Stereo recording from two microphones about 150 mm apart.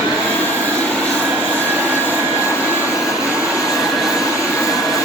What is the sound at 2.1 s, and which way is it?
Vacuum cleaner, 5° right (ahead or behind).